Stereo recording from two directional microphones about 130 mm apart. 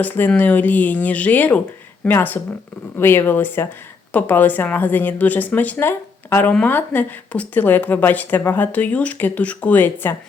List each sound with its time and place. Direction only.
0.0 s speech: 15° left (ahead or behind)